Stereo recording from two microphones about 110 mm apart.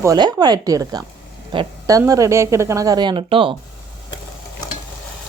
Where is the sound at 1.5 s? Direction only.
45° right (ahead or behind).